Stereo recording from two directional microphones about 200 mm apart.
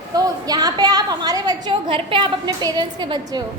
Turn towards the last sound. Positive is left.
turn(degrees=-20)  # may be behind; listen again after turning